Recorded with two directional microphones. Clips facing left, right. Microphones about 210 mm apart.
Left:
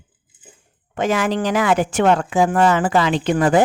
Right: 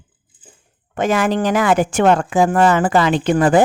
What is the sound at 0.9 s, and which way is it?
Speech, 50° right (ahead or behind).